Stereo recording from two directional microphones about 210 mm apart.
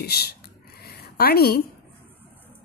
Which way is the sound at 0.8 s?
50° left (ahead or behind).